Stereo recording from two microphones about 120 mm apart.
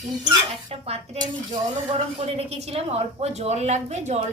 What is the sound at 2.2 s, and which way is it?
A child's voice, 65° right (ahead or behind).